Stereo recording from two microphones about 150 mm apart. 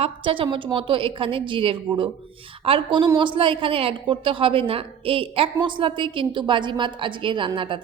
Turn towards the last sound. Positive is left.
turn(degrees=-35)  # may be behind; listen again after turning